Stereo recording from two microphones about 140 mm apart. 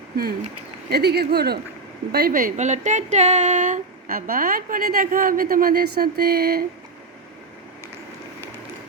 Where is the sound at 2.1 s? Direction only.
90° right.